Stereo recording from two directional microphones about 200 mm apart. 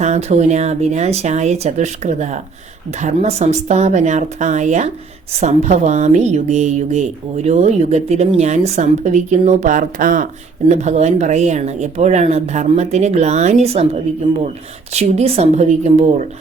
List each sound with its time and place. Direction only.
0.0 s speech: 35° right (ahead or behind)